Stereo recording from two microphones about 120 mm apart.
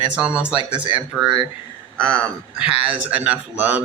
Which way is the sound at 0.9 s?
40° right (ahead or behind).